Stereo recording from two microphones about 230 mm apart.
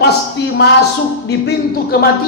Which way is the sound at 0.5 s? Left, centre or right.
Left.